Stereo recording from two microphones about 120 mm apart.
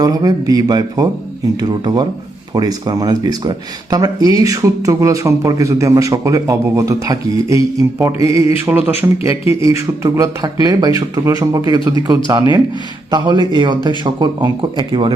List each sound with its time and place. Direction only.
0.0 s speech: 30° right (ahead or behind)
8.6 s music: 15° right (ahead or behind)
9.6 s speech: 25° right (ahead or behind); by 15.1 s 40° right (ahead or behind)